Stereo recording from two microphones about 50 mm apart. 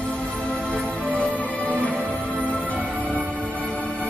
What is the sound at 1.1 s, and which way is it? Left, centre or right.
Music, left.